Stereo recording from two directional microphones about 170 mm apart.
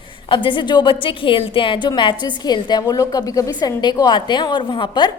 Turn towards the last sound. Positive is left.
turn(degrees=25)  # may be behind; listen again after turning